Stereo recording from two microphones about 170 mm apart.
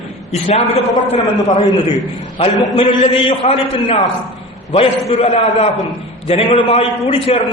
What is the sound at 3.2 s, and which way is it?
A man's voice, 35° left (ahead or behind).